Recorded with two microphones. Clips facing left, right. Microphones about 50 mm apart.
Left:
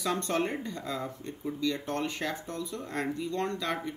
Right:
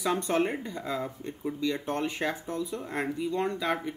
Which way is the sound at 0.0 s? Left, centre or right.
Centre.